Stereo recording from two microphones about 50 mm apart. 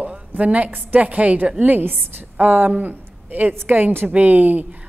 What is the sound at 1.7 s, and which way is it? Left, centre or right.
A woman's voice, right.